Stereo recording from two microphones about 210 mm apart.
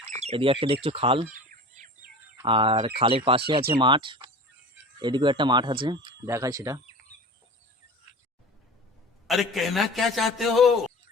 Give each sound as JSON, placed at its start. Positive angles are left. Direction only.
{"t": 0.1, "sound": "speech", "side_deg": -30}
{"t": 1.3, "sound": "bird", "side_deg": -35}
{"t": 2.4, "sound": "speech", "side_deg": -25}
{"t": 9.2, "sound": "a man's voice", "side_deg": 0}